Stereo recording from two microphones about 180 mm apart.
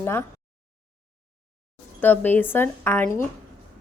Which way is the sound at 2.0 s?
10° left (ahead or behind).